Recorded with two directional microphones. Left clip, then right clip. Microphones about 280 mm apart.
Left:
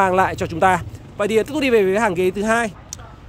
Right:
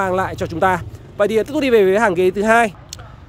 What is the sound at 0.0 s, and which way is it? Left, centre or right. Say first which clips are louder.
Speech: left 3 dB; centre.